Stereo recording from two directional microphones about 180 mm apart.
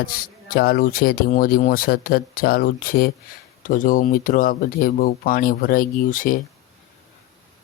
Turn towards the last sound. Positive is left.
turn(degrees=50)  # may be behind; listen again after turning